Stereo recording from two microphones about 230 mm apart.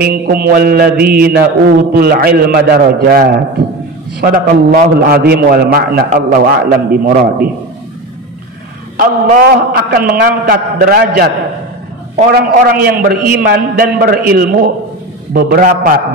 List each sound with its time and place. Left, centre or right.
0.0 s mantra: right
8.9 s mantra: right